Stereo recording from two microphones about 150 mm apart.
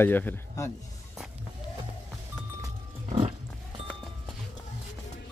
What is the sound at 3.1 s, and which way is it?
Pig, 45° right (ahead or behind).